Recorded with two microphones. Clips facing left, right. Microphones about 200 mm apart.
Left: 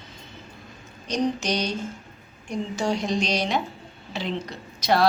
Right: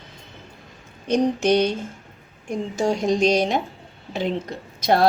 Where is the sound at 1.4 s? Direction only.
55° right (ahead or behind).